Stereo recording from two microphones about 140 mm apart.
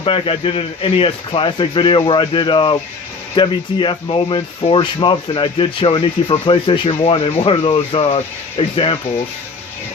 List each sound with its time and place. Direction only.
0.0 s speech: 40° left (ahead or behind)